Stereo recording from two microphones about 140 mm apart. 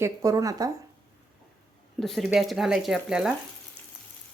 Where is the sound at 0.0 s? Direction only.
25° right (ahead or behind).